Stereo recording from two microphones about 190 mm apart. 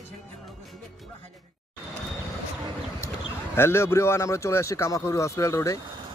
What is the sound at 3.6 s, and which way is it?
Speech, 15° left (ahead or behind).